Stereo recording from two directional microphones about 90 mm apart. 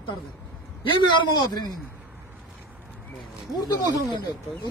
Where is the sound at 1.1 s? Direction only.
55° left (ahead or behind).